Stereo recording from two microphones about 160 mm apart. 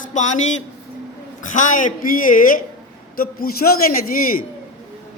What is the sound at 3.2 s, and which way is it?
Speech, 70° left (ahead or behind).